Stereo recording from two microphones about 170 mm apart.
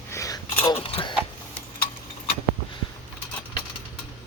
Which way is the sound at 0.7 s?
35° left (ahead or behind).